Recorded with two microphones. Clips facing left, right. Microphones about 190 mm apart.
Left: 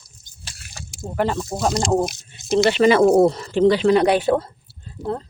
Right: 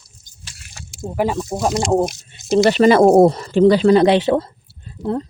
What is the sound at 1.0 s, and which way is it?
Speech, 10° right (ahead or behind).